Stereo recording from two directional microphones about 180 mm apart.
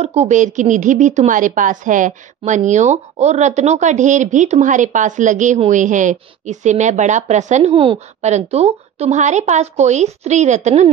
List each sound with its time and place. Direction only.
0.0 s a woman's voice: 35° right (ahead or behind)